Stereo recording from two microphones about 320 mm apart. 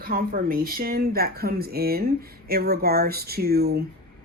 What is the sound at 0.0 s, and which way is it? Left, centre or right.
Speech, right.